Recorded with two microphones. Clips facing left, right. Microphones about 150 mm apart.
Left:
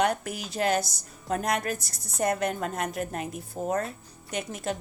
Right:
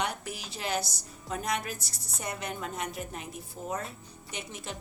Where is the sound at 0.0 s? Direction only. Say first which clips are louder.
Left 8 dB; 50° left (ahead or behind).